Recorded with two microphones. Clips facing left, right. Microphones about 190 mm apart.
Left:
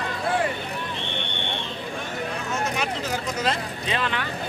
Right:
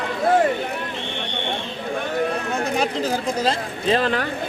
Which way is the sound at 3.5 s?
40° right (ahead or behind).